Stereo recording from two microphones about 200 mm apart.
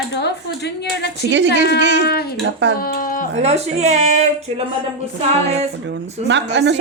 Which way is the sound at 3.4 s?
35° right (ahead or behind).